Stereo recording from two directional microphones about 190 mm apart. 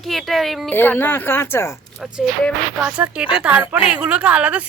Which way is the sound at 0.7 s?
10° left (ahead or behind).